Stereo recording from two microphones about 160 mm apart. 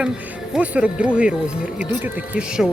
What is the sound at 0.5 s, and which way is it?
Speech, 5° right (ahead or behind).